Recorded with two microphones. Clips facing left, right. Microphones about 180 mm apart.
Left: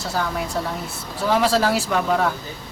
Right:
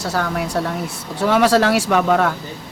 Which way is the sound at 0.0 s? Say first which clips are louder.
Right 3 dB; 75° right (ahead or behind).